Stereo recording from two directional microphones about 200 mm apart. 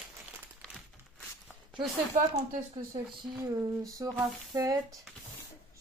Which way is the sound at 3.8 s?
15° right (ahead or behind).